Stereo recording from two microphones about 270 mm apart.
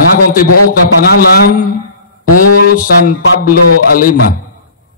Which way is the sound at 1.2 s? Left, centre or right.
Left.